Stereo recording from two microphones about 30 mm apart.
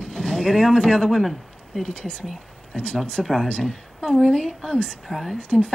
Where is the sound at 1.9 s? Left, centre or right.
Left.